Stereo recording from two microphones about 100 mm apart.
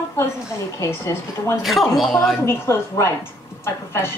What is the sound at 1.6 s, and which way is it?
Speech, centre (ahead or behind).